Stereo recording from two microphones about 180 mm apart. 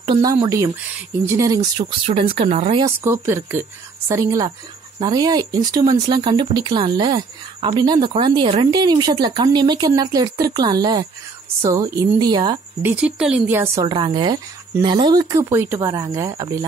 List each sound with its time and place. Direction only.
0.0 s speech: 25° right (ahead or behind)
3.0 s speech: 15° right (ahead or behind)
12.8 s speech: 5° right (ahead or behind)
13.8 s speech: 25° right (ahead or behind)